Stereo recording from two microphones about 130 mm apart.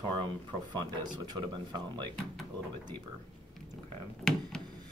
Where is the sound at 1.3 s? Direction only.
35° right (ahead or behind).